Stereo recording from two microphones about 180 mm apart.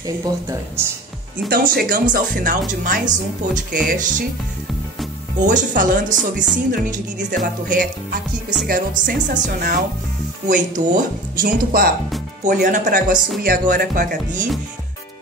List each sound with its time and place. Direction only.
1.5 s speech: 55° right (ahead or behind)
5.4 s speech: 45° right (ahead or behind)